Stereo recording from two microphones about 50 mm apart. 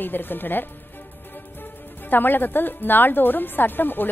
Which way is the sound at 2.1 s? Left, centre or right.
Left.